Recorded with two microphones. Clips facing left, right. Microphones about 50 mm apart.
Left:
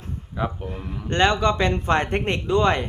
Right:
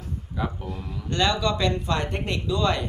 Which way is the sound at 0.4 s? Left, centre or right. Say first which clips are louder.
Left 3 dB; left.